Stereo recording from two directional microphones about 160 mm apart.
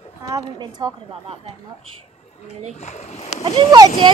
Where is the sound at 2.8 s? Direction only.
45° left (ahead or behind).